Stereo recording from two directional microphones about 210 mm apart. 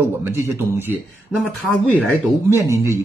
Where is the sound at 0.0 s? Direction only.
10° right (ahead or behind).